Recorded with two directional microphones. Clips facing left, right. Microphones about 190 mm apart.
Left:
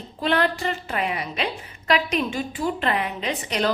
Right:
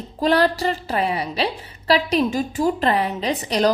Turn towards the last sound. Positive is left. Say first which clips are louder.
# right 5 dB
turn(degrees=-35)  # may be behind; listen again after turning